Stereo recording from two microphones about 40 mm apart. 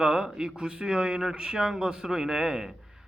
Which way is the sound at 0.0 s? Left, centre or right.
Centre.